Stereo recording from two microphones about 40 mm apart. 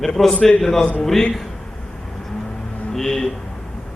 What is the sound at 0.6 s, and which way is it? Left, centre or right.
Speech, centre.